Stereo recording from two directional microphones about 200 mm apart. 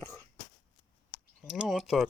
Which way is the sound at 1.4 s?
5° right (ahead or behind).